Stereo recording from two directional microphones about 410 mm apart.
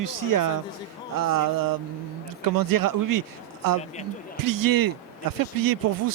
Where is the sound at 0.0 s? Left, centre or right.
Right.